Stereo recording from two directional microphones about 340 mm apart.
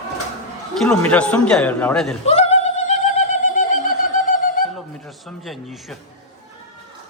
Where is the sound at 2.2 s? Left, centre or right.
Centre.